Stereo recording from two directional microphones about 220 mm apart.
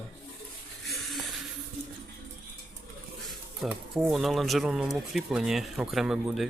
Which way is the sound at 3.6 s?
Centre (ahead or behind).